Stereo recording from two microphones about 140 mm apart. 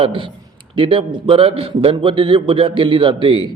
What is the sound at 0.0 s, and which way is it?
A man's voice, 35° right (ahead or behind).